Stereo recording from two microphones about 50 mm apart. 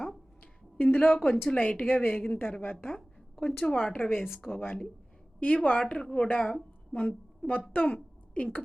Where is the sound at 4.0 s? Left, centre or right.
Left.